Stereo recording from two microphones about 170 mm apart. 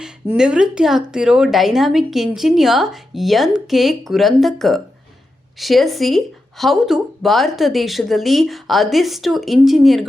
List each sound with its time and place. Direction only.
0.0 s speech: 5° right (ahead or behind)